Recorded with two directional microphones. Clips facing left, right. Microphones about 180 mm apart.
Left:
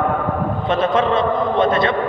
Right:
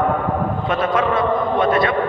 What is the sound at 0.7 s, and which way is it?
A man's voice, 25° left (ahead or behind).